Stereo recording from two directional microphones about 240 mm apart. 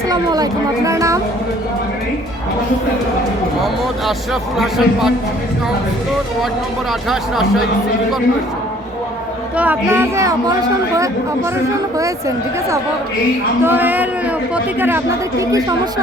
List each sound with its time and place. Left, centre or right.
0.1 s speech: centre
4.5 s a man's voice: centre
9.6 s speech: centre
13.6 s speech: centre